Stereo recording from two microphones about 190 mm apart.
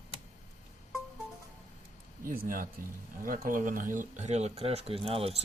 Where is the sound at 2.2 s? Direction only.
45° right (ahead or behind).